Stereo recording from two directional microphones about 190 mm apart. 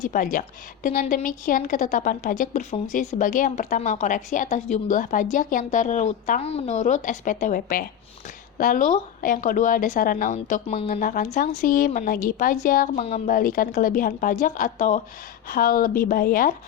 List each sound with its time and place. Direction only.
0.0 s a woman's voice: 45° left (ahead or behind)
11.0 s a woman's voice: 45° left (ahead or behind)